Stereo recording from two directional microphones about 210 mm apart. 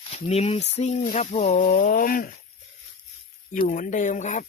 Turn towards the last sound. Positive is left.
turn(degrees=35)  # may be behind; listen again after turning